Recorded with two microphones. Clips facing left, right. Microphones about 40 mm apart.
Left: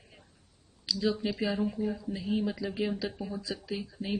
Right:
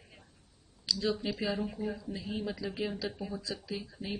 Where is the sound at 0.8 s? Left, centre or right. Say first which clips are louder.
Left 2 dB; centre.